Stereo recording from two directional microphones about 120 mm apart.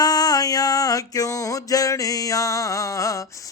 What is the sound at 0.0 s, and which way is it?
Music, 35° left (ahead or behind).